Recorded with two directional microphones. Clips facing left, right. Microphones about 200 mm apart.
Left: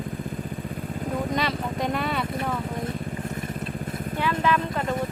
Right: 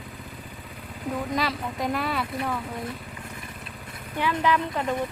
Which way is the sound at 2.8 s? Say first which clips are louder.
Left 5 dB; 45° left (ahead or behind).